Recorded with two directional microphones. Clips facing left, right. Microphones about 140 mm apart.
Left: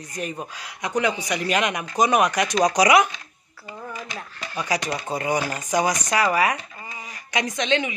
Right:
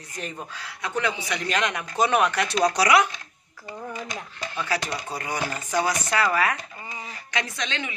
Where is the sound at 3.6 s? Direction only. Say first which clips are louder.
Right 1 dB; 10° left (ahead or behind).